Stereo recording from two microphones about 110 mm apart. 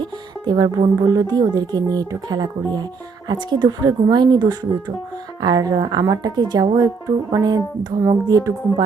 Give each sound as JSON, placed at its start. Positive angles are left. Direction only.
{"t": 0.0, "sound": "speech", "side_deg": -45}